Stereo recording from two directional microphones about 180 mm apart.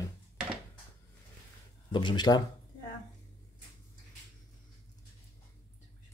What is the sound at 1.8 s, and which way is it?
Speech, 25° left (ahead or behind).